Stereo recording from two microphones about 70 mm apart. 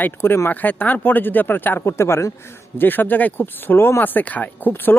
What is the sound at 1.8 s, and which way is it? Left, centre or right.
Speech, left.